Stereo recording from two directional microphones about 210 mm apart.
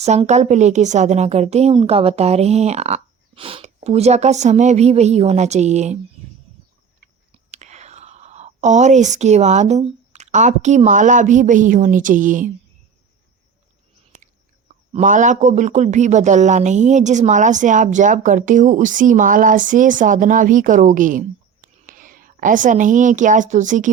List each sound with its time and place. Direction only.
0.0 s a man's voice: 30° right (ahead or behind)
7.5 s speech: 35° right (ahead or behind)
14.7 s a man's voice: 35° right (ahead or behind)